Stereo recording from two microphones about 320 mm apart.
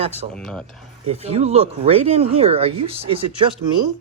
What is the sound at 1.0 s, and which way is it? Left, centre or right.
Speech, centre.